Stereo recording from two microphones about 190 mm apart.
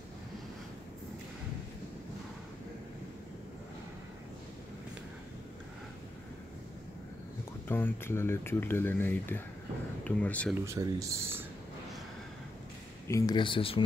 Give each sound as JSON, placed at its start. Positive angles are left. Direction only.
{"t": 7.6, "sound": "speech", "side_deg": 10}
{"t": 10.6, "sound": "speech", "side_deg": -15}
{"t": 13.1, "sound": "speech", "side_deg": 25}